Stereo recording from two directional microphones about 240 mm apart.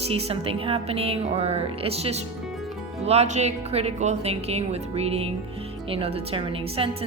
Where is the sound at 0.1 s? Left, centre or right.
Right.